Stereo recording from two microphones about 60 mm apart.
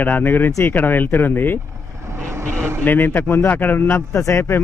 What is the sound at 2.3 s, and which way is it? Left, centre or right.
Vehicle, right.